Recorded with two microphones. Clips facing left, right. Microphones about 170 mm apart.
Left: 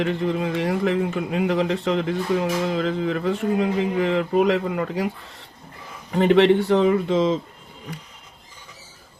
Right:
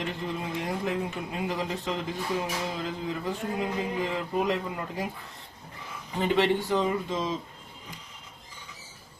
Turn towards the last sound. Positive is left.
turn(degrees=70)  # may be behind; listen again after turning